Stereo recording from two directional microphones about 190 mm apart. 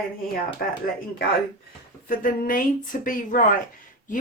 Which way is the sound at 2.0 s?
50° left (ahead or behind).